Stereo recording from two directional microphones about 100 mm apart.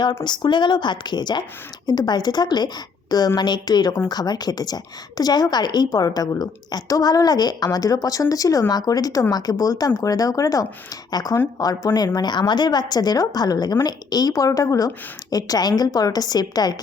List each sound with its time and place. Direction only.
0.3 s a woman's voice: 50° left (ahead or behind)